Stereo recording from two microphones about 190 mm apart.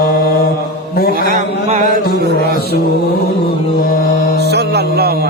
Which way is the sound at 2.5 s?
55° left (ahead or behind).